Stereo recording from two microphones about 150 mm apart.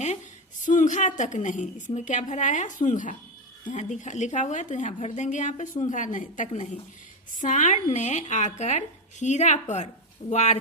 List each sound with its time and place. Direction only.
0.6 s a woman's voice: 55° left (ahead or behind)